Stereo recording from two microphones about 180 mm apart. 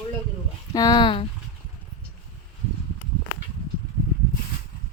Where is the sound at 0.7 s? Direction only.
20° left (ahead or behind).